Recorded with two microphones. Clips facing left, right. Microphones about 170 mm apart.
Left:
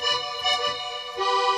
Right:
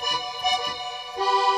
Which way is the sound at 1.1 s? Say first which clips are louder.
Right 2 dB; 35° right (ahead or behind).